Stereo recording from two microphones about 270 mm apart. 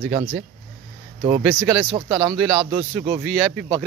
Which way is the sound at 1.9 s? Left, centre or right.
Centre.